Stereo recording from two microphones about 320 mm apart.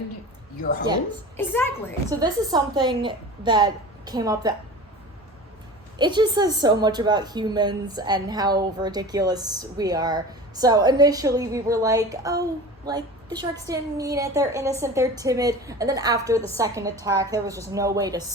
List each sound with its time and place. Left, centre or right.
0.6 s speech: left
1.4 s a child's voice: centre
2.0 s a woman's voice: centre
6.0 s a woman's voice: centre